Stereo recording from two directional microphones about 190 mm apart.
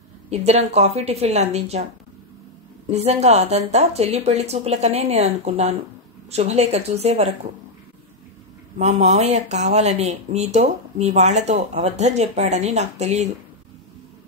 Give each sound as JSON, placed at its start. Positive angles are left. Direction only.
{"t": 0.5, "sound": "speech", "side_deg": -35}
{"t": 2.9, "sound": "speech", "side_deg": -35}
{"t": 8.7, "sound": "speech", "side_deg": -35}